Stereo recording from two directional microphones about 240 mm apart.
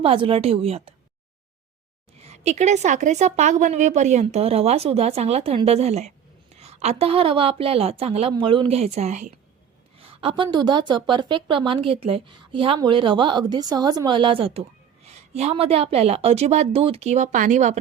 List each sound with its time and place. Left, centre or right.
0.0 s speech: right
2.1 s speech: right